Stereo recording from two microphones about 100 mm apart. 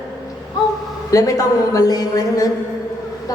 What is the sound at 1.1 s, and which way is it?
A woman's voice, 35° left (ahead or behind).